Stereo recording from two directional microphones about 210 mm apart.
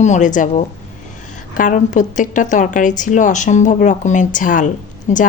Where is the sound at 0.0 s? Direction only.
35° left (ahead or behind).